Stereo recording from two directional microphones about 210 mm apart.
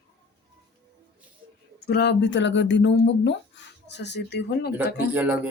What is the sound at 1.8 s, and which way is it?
Speech, 50° left (ahead or behind).